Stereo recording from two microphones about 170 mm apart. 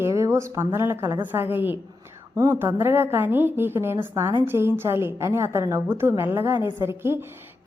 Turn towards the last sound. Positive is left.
turn(degrees=-15)  # may be behind; listen again after turning